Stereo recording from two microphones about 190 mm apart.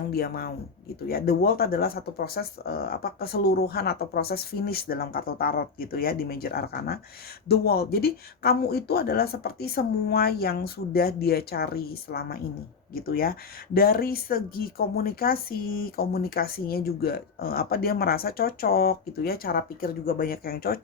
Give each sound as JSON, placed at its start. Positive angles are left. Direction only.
{"t": 0.1, "sound": "speech", "side_deg": 55}